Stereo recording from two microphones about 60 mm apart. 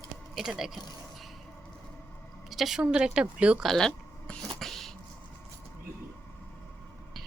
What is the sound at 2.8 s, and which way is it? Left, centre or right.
Speech, centre.